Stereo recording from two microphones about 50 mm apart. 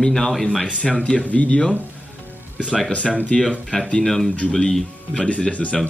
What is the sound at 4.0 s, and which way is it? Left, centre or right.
Speech, centre.